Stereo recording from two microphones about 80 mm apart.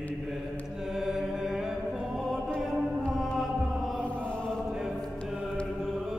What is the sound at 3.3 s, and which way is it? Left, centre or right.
Chant, centre.